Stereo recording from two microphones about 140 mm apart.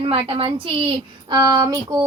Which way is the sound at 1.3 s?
30° right (ahead or behind).